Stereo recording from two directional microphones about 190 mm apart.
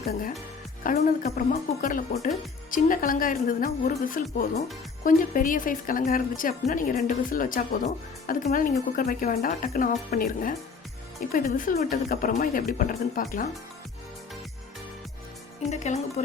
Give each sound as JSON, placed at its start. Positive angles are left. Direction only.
{"t": 0.1, "sound": "a woman's voice", "side_deg": 45}
{"t": 15.7, "sound": "a woman's voice", "side_deg": 35}